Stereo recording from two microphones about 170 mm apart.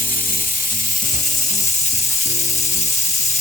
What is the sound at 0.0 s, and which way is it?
Music, 55° left (ahead or behind).